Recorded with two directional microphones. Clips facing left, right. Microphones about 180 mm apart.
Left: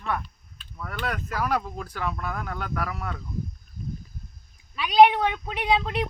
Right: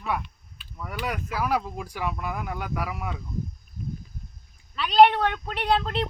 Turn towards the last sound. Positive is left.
turn(degrees=10)  # may be behind; listen again after turning